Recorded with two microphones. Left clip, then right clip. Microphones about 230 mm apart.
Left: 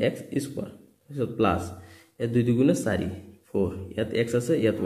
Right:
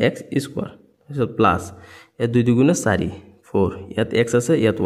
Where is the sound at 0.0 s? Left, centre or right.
Right.